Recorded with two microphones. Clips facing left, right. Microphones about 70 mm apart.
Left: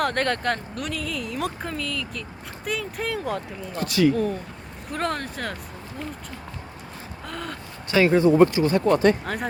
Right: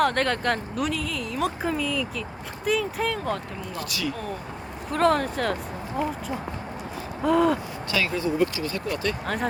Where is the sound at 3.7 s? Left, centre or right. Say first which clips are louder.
Left 11 dB; left.